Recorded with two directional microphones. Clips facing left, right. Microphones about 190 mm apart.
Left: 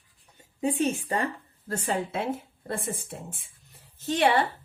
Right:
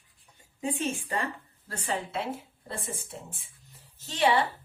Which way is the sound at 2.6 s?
55° left (ahead or behind).